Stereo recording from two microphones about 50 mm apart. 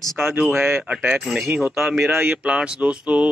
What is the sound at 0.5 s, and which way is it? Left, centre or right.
Speech, right.